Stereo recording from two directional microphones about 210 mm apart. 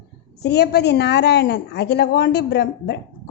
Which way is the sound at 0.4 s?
50° left (ahead or behind).